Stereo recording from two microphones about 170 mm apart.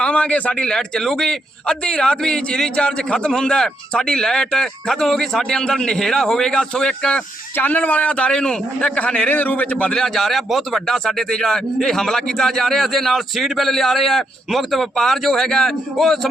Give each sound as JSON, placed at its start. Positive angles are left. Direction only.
{"t": 0.0, "sound": "a man's voice", "side_deg": 5}